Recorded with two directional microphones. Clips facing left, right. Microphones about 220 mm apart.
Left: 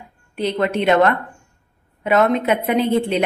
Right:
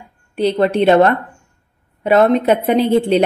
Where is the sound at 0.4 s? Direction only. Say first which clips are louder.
Right 5 dB; 35° right (ahead or behind).